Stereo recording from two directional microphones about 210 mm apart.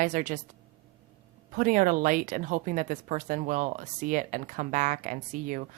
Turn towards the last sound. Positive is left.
turn(degrees=-40)  # may be behind; listen again after turning